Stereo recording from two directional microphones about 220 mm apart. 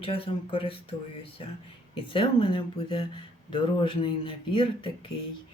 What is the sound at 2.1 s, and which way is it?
Speech, 25° left (ahead or behind).